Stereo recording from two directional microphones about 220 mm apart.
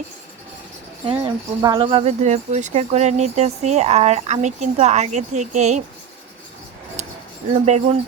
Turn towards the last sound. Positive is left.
turn(degrees=-30)  # may be behind; listen again after turning